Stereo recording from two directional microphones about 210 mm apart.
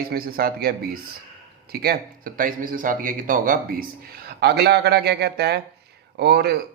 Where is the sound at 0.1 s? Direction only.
45° right (ahead or behind).